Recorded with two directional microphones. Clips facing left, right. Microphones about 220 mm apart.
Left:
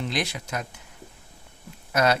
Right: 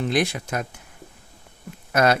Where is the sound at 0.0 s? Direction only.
50° right (ahead or behind).